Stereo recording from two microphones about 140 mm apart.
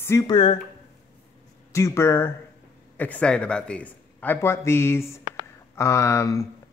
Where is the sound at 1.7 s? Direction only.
20° left (ahead or behind).